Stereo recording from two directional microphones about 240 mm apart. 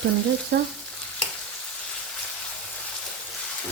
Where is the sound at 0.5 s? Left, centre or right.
Right.